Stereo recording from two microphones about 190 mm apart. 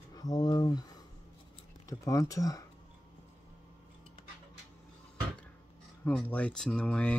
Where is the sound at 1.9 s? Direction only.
15° left (ahead or behind).